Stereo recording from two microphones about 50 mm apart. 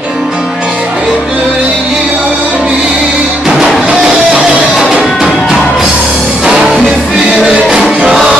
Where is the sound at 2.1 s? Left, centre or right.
Right.